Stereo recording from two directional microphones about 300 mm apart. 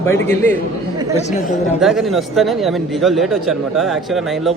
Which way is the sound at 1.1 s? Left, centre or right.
Left.